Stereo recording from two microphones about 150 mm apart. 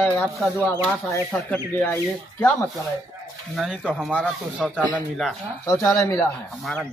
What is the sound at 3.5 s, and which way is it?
Speech, centre (ahead or behind).